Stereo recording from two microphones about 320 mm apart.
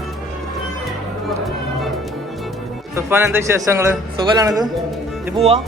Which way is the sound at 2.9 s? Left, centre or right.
Centre.